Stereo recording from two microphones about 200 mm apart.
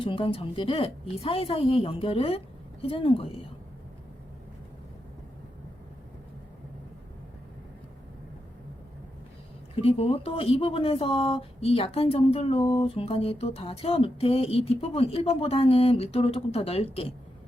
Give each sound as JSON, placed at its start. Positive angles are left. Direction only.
{"t": 0.0, "sound": "speech", "side_deg": 25}
{"t": 9.7, "sound": "speech", "side_deg": 30}